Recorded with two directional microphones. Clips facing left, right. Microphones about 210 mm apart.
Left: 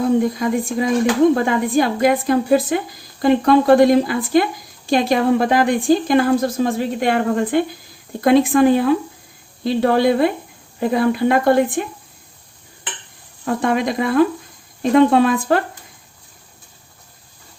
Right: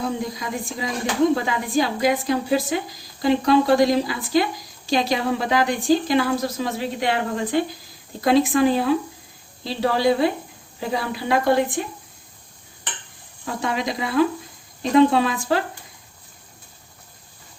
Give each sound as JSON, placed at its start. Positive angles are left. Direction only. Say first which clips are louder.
{"t": 0.2, "sound": "a woman's voice", "louder": "left 10 dB", "side_deg": 55}
{"t": 13.4, "sound": "a woman's voice", "louder": "left 7 dB", "side_deg": 55}